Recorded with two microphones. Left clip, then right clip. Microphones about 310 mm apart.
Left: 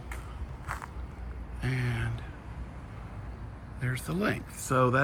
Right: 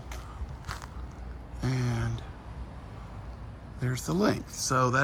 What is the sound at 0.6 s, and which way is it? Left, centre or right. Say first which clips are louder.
Biting: left 3 dB; centre.